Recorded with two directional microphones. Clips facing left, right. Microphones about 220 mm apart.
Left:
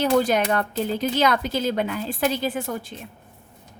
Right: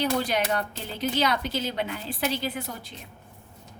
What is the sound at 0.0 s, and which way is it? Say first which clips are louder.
A woman's voice: left 6 dB; 45° left (ahead or behind).